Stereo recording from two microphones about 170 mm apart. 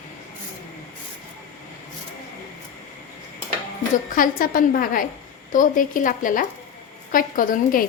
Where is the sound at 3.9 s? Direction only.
50° left (ahead or behind).